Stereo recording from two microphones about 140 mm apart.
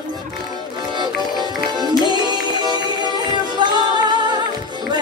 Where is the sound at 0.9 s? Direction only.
30° right (ahead or behind).